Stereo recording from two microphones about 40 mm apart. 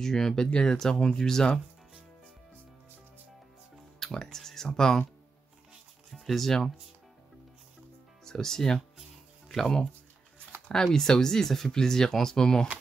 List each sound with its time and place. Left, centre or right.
0.0 s speech: centre
0.7 s speech: centre
4.0 s speech: centre
6.1 s speech: centre
8.3 s speech: centre